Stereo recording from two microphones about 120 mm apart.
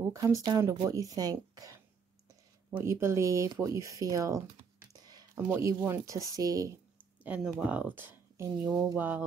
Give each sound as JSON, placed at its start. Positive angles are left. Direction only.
{"t": 0.1, "sound": "a woman's voice", "side_deg": -30}
{"t": 4.7, "sound": "computer keyboard", "side_deg": -30}
{"t": 5.4, "sound": "speech", "side_deg": -20}
{"t": 7.2, "sound": "speech", "side_deg": -10}
{"t": 8.6, "sound": "a woman's voice", "side_deg": -30}
{"t": 8.9, "sound": "a sound", "side_deg": -15}